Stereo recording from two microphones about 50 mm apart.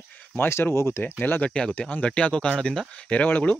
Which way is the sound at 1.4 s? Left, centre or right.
Left.